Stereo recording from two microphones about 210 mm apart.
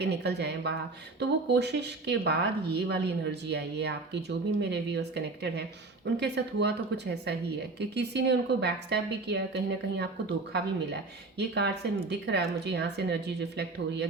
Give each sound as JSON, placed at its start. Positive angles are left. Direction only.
{"t": 0.0, "sound": "a woman's voice", "side_deg": -55}